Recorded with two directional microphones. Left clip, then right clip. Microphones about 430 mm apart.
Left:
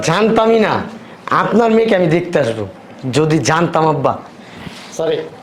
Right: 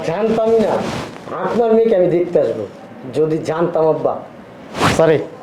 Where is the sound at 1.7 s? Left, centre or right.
Left.